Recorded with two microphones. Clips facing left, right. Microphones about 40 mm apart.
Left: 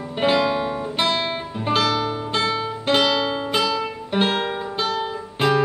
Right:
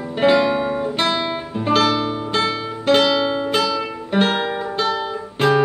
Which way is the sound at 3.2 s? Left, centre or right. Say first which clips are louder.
Right 3 dB; centre.